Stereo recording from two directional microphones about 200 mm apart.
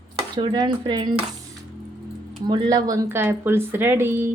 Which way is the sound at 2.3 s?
20° right (ahead or behind).